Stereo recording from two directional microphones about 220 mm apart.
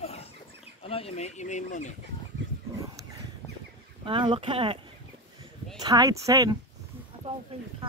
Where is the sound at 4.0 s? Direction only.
25° right (ahead or behind).